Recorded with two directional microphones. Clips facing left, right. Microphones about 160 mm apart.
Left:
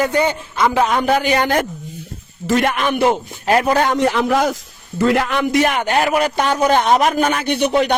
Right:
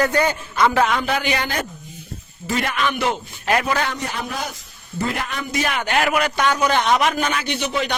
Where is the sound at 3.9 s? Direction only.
80° left.